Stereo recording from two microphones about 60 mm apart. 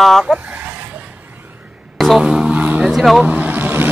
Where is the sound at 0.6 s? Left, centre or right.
Right.